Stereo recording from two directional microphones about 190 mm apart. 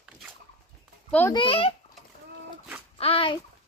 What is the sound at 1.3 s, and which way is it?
Speech, 30° left (ahead or behind).